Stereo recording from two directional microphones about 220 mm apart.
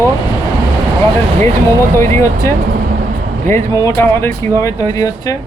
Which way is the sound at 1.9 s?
10° left (ahead or behind).